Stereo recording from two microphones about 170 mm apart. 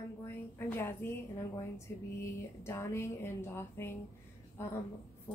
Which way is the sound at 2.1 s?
15° left (ahead or behind).